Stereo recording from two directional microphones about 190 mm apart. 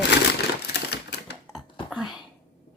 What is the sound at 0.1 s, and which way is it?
Typewriter, 60° left (ahead or behind).